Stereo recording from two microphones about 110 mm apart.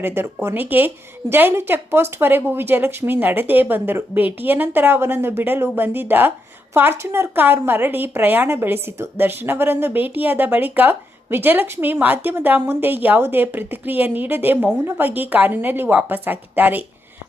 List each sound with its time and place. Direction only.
0.0 s a woman's voice: 20° right (ahead or behind)